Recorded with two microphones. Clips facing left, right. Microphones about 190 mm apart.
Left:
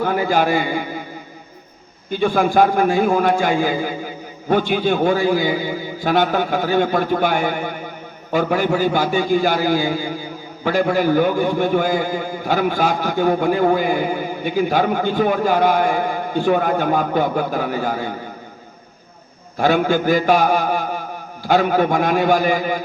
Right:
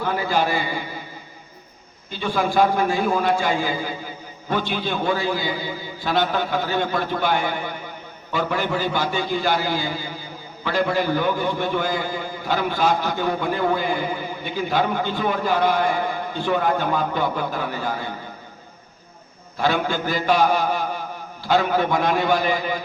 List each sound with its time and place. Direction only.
0.0 s a man's voice: 45° left (ahead or behind)
2.0 s a man's voice: 50° left (ahead or behind)
19.5 s a man's voice: 45° left (ahead or behind)